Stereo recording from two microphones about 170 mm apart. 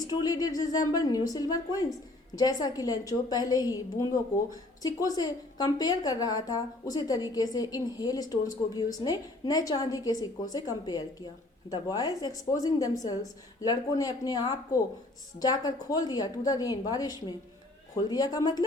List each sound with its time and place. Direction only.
0.0 s a woman's voice: 20° left (ahead or behind)